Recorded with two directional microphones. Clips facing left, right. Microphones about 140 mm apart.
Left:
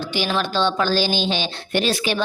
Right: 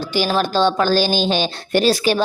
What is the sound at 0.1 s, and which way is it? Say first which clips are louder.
A woman's voice: right 5 dB; 40° right (ahead or behind).